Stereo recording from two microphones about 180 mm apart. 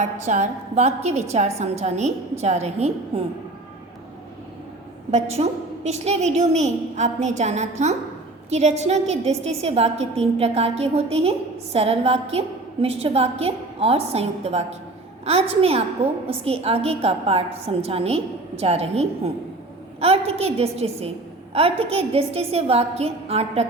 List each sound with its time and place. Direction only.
0.0 s a woman's voice: 40° right (ahead or behind)
5.1 s a woman's voice: 35° right (ahead or behind)